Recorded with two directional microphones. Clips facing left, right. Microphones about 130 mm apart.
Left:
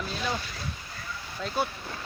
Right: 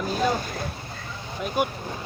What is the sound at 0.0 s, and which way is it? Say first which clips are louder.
Boat: right 8 dB; 45° right (ahead or behind).